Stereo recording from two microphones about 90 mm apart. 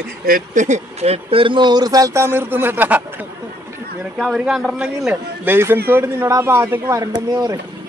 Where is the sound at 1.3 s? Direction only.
75° right (ahead or behind); by 2.2 s 45° right (ahead or behind).